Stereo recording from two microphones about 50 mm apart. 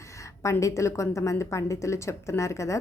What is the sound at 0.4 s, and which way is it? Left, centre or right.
A woman's voice, left.